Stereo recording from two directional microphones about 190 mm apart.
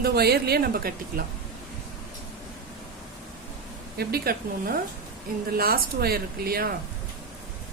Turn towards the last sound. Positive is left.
turn(degrees=-50)  # may be behind; listen again after turning